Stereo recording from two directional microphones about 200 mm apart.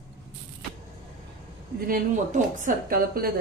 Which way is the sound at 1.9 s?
45° right (ahead or behind).